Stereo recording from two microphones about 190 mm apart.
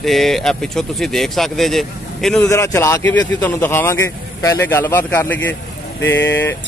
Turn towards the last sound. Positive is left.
turn(degrees=10)  # may be behind; listen again after turning